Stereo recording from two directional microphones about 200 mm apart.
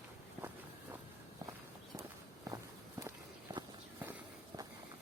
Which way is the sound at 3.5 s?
20° right (ahead or behind).